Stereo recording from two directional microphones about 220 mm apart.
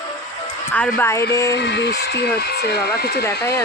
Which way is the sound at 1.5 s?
50° left (ahead or behind).